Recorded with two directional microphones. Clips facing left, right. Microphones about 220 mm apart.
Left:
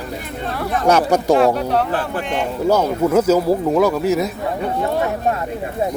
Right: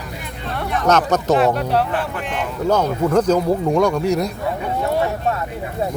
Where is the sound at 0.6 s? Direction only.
10° left (ahead or behind).